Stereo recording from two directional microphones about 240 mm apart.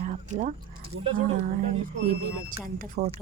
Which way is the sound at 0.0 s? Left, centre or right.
Right.